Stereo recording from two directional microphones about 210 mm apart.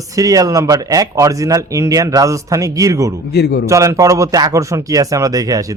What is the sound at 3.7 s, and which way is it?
Speech, 15° right (ahead or behind).